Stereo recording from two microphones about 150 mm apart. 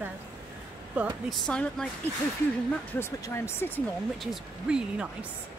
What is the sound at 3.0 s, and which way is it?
Speech, 20° left (ahead or behind).